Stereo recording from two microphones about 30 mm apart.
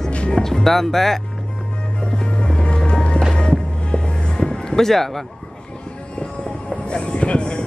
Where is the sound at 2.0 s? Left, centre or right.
Left.